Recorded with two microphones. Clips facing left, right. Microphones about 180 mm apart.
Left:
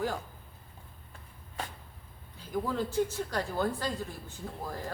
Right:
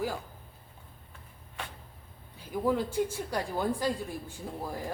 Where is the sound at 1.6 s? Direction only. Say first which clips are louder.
Left 3 dB; 40° left (ahead or behind).